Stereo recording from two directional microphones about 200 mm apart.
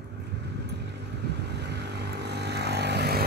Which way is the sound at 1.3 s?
55° right (ahead or behind).